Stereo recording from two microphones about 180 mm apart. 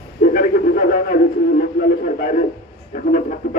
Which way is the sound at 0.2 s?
55° left (ahead or behind).